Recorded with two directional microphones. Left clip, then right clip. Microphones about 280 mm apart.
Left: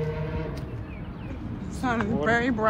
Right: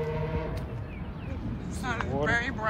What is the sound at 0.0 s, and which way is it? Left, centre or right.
Music, right.